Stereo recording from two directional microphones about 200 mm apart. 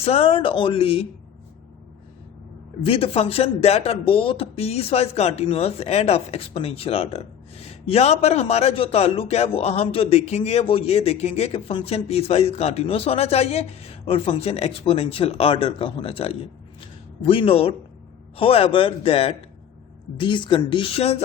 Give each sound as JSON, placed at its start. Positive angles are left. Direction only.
{"t": 0.0, "sound": "speech", "side_deg": 30}
{"t": 2.8, "sound": "speech", "side_deg": 30}